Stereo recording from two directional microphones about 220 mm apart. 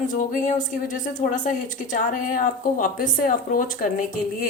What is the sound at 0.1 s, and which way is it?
Speech, 35° left (ahead or behind).